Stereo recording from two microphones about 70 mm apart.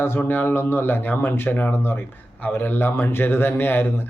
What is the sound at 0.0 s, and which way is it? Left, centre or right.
A man's voice, left.